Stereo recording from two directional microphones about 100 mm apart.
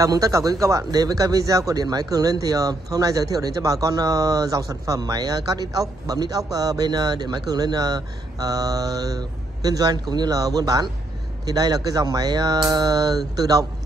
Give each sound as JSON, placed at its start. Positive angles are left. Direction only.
{"t": 0.0, "sound": "speech", "side_deg": -30}